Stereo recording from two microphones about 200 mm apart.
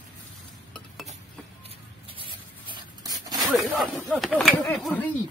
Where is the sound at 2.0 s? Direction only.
25° right (ahead or behind).